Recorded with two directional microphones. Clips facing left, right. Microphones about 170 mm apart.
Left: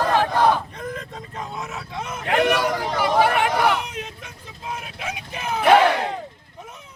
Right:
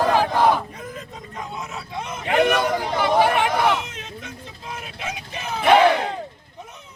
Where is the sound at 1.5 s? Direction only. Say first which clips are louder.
Even; centre (ahead or behind).